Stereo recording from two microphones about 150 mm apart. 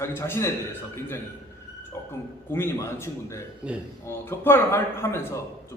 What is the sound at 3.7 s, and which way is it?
Speech, 10° right (ahead or behind).